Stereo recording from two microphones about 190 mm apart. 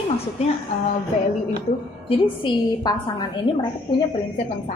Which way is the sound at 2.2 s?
25° left (ahead or behind).